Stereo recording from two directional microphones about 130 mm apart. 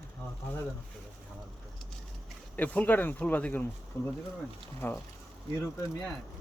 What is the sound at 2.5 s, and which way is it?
Speech, 10° left (ahead or behind).